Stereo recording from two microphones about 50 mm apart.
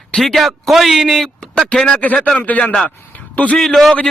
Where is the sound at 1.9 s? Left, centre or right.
Left.